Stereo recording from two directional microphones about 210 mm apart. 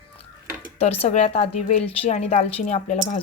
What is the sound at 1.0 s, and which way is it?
A woman's voice, 30° left (ahead or behind).